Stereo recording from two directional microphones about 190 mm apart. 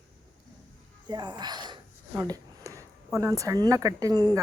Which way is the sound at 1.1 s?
20° right (ahead or behind).